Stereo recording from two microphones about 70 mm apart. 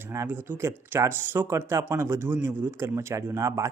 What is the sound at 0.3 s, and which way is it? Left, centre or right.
A man's voice, right.